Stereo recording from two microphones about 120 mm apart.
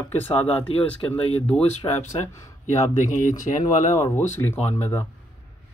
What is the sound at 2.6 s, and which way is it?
Speech, 80° left.